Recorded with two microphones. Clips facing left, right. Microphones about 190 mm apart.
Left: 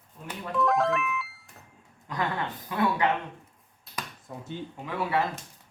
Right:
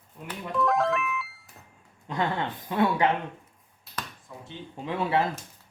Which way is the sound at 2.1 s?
25° right (ahead or behind).